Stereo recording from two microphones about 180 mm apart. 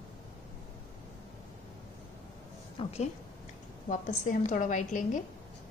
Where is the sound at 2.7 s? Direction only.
35° left (ahead or behind).